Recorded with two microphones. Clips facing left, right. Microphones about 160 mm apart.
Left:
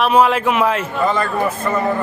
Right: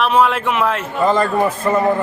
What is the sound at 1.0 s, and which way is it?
Speech, 35° right (ahead or behind).